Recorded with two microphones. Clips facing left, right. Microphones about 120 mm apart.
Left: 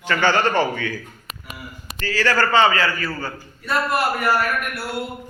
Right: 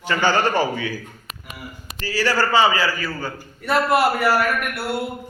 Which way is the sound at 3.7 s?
70° right (ahead or behind).